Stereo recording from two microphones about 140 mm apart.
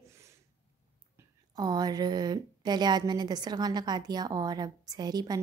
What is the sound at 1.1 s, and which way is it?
A woman's voice, 30° right (ahead or behind).